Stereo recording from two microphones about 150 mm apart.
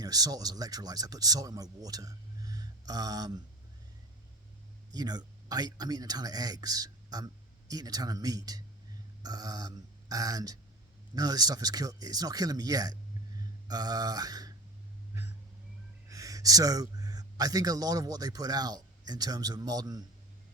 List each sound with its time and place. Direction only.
0.0 s speech: 25° right (ahead or behind)
4.9 s speech: 25° right (ahead or behind)
13.7 s a sound: 25° right (ahead or behind)
16.0 s speech: 20° right (ahead or behind)